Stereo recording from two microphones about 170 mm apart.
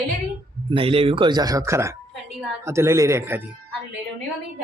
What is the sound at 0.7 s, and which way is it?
Speech, 35° right (ahead or behind).